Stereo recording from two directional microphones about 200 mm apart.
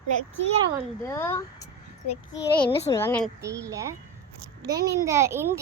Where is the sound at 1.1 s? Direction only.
15° left (ahead or behind).